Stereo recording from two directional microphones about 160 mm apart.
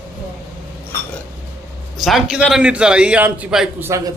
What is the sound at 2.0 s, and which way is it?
A man's voice, centre (ahead or behind).